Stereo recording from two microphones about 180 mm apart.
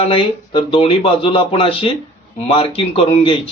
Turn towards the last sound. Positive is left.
turn(degrees=30)  # may be behind; listen again after turning